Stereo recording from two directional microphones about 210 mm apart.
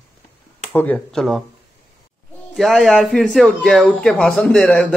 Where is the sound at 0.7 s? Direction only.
10° left (ahead or behind).